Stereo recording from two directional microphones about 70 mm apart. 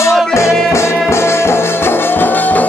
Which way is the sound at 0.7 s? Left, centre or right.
Left.